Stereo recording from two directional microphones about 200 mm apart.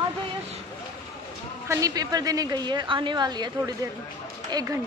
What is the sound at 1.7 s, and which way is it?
A woman's voice, 20° right (ahead or behind).